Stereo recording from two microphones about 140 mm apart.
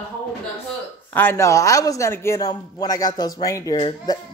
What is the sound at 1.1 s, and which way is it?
A man's voice, 15° left (ahead or behind).